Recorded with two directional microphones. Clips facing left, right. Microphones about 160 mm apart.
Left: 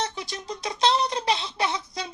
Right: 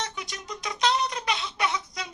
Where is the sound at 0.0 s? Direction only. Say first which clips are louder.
Left 4 dB; 30° left (ahead or behind).